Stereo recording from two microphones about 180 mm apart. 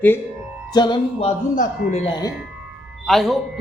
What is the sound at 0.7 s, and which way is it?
Music, 25° left (ahead or behind).